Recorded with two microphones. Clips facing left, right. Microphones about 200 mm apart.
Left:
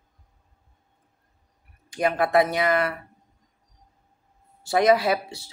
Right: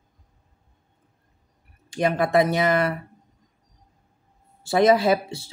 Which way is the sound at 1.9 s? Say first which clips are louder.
Right 1 dB; 25° right (ahead or behind).